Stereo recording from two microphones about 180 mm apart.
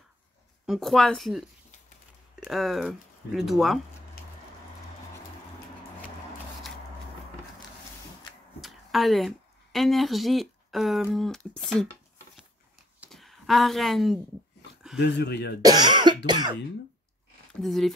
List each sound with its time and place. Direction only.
0.7 s speech: centre (ahead or behind)
2.4 s speech: centre (ahead or behind)
8.5 s speech: centre (ahead or behind)
13.1 s speech: centre (ahead or behind)
15.0 s speech: 70° left (ahead or behind)
15.6 s speech: 25° right (ahead or behind)
17.6 s speech: centre (ahead or behind)